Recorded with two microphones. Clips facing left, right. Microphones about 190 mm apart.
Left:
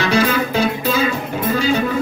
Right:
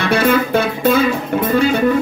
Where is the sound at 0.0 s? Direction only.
55° right (ahead or behind).